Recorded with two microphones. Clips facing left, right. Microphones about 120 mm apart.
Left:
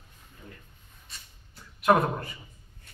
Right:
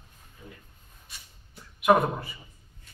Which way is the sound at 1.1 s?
5° right (ahead or behind).